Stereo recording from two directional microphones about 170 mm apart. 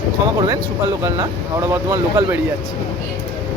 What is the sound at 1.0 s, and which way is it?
Speech, 20° right (ahead or behind).